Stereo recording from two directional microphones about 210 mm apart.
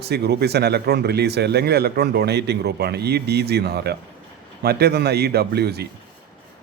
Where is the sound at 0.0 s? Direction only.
50° right (ahead or behind).